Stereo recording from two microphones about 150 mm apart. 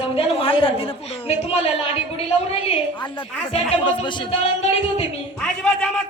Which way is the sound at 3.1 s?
35° left (ahead or behind).